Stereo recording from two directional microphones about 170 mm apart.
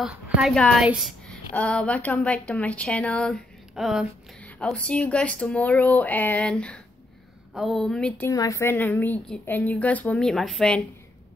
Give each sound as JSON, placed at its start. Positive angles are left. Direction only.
{"t": 0.0, "sound": "a woman's voice", "side_deg": 0}
{"t": 8.3, "sound": "a woman's voice", "side_deg": 20}